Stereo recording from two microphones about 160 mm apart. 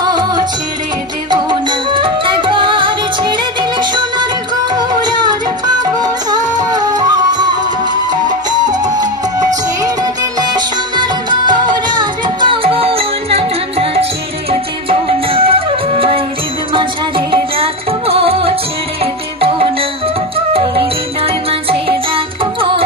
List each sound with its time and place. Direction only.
0.0 s music: 25° right (ahead or behind)
17.3 s music: 35° right (ahead or behind)